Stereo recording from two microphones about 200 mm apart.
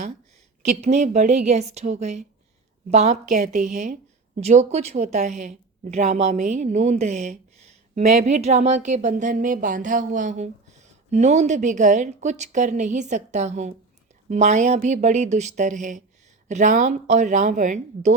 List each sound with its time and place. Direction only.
0.7 s a woman's voice: 35° right (ahead or behind)